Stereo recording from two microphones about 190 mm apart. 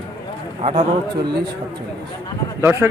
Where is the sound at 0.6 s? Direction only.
35° right (ahead or behind).